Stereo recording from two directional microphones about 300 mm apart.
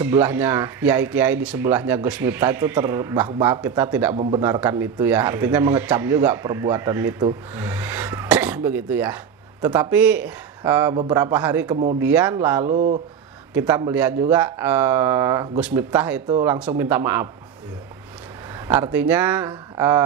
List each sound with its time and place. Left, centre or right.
0.0 s a man's voice: centre
4.1 s speech: right
4.4 s a man's voice: centre
12.6 s speech: right
13.5 s a man's voice: centre
18.7 s speech: centre